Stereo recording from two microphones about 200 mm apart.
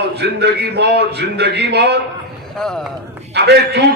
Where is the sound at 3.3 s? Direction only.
55° right (ahead or behind).